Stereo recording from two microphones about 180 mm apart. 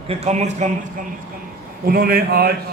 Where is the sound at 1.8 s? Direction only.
55° right (ahead or behind).